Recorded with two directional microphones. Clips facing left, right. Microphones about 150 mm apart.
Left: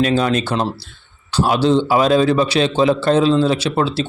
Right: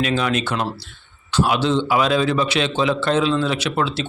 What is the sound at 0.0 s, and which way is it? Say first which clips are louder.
Speech: left 4 dB; 35° left (ahead or behind).